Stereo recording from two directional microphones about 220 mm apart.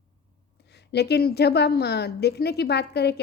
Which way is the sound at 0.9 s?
45° left (ahead or behind).